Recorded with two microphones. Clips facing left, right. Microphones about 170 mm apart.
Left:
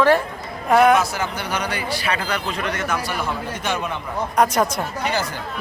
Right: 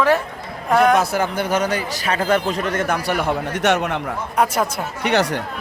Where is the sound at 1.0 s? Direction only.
55° right (ahead or behind); by 4.0 s 75° right (ahead or behind).